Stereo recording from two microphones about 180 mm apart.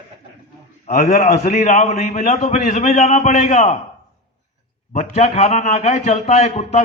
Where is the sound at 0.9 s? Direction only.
40° left (ahead or behind).